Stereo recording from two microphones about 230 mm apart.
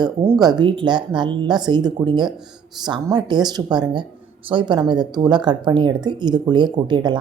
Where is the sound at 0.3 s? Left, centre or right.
Centre.